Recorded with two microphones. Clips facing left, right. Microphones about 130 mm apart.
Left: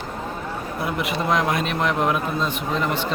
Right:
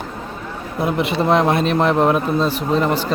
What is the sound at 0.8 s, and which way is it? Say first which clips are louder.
Speech: right 7 dB; 25° right (ahead or behind).